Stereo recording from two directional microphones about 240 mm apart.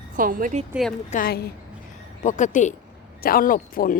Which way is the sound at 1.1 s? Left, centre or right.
Left.